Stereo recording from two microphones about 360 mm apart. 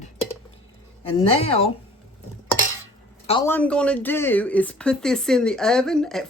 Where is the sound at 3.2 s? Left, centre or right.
Centre.